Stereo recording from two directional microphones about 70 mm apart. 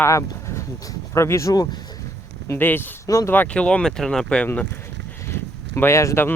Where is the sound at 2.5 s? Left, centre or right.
Left.